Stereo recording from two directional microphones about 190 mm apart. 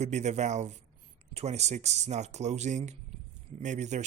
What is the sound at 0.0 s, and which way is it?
Speech, 35° right (ahead or behind).